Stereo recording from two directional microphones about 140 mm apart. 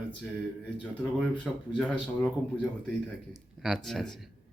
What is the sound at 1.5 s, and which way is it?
Speech, 5° left (ahead or behind).